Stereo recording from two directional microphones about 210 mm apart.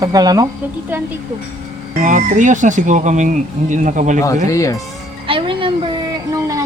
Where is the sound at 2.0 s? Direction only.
35° right (ahead or behind).